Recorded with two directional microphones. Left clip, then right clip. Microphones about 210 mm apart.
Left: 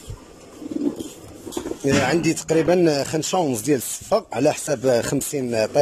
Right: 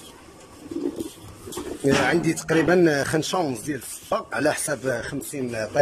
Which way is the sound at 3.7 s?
25° left (ahead or behind).